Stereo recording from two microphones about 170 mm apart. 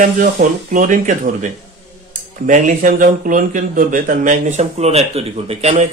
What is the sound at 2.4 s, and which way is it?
Speech, 50° right (ahead or behind).